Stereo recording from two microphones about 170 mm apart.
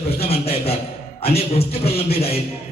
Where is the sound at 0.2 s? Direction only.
35° left (ahead or behind).